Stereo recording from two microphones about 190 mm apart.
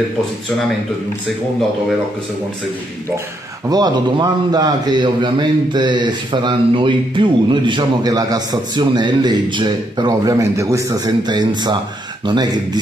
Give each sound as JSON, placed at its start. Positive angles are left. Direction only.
{"t": 3.6, "sound": "a man's voice", "side_deg": -20}